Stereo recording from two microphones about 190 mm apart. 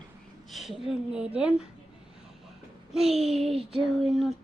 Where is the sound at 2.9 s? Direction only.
Centre (ahead or behind).